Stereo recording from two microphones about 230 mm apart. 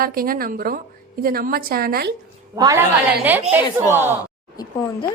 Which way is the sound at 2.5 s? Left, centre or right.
Centre.